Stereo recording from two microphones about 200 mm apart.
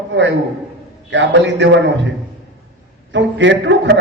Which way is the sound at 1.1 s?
65° right (ahead or behind).